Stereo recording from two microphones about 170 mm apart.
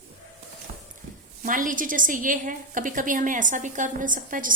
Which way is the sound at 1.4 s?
50° right (ahead or behind).